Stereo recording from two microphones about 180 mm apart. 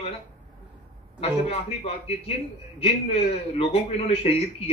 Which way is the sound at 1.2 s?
35° left (ahead or behind).